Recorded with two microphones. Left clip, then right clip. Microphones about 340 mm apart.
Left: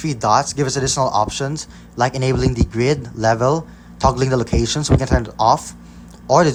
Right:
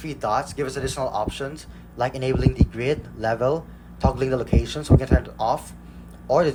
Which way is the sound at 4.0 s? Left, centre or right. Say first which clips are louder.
Left 8 dB; centre.